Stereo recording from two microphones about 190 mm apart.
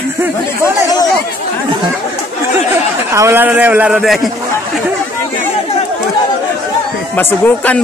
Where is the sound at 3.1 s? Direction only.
15° right (ahead or behind).